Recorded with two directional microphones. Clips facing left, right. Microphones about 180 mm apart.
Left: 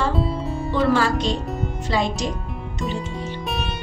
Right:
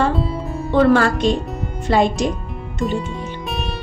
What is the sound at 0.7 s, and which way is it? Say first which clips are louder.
A woman's voice: right 6 dB; 55° right (ahead or behind).